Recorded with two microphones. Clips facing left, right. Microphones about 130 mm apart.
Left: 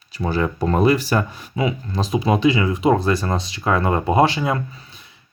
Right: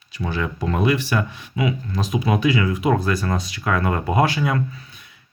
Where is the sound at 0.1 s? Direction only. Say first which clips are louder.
Left 4 dB; 35° left (ahead or behind).